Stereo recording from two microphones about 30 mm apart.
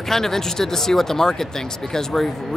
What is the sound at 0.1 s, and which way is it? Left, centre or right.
Speech, centre.